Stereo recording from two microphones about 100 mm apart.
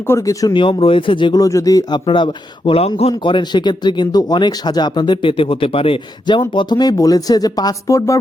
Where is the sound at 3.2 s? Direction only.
55° left (ahead or behind).